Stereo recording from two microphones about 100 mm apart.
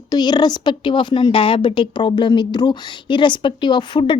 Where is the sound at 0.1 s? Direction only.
45° left (ahead or behind).